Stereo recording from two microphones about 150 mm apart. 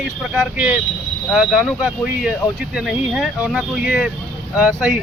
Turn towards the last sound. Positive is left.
turn(degrees=-5)  # may be behind; listen again after turning